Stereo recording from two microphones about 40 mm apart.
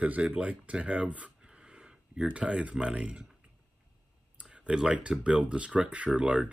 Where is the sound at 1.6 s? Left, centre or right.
Right.